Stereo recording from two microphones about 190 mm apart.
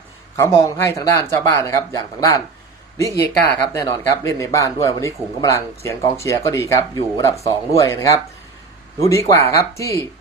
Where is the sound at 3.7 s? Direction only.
15° left (ahead or behind).